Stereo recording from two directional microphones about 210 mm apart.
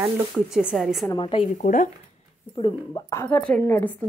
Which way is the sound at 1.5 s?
40° left (ahead or behind).